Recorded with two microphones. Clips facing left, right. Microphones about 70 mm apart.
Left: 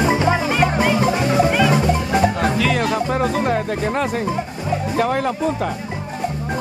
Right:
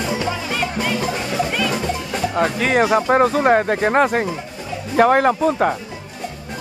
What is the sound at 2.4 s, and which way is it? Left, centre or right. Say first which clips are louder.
Music: right 2 dB; right.